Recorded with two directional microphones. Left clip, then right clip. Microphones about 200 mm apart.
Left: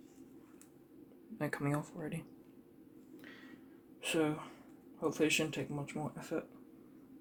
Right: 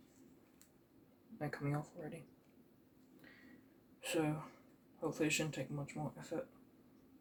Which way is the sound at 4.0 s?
45° left (ahead or behind).